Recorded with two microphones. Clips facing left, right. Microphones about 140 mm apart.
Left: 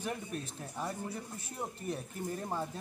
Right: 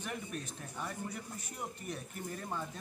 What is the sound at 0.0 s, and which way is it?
Speech, 30° left (ahead or behind).